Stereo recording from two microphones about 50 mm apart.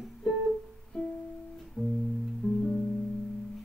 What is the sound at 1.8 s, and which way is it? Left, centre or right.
Music, left.